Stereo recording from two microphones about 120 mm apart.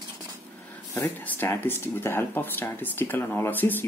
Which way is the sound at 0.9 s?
15° left (ahead or behind).